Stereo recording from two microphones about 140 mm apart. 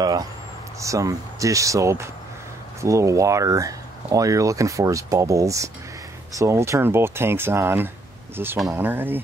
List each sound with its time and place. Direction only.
0.0 s speech: 25° right (ahead or behind)